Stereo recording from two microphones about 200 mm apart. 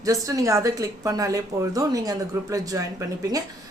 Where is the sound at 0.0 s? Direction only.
15° right (ahead or behind).